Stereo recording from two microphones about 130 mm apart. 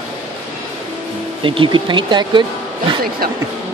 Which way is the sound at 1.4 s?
40° right (ahead or behind).